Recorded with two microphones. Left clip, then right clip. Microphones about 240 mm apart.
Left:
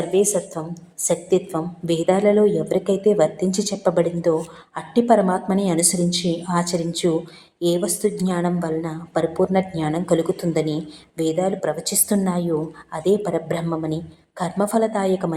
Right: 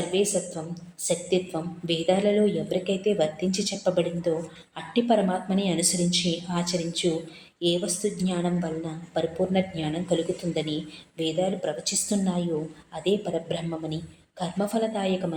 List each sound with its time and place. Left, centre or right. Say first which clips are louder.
0.1 s a woman's voice: left 7 dB; centre